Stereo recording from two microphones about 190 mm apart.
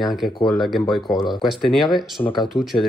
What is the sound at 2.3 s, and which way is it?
Speech, 25° left (ahead or behind).